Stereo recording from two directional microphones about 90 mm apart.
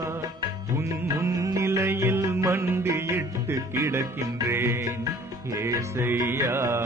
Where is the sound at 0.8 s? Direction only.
30° right (ahead or behind).